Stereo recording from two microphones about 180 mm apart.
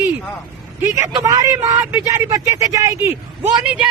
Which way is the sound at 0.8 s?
15° right (ahead or behind).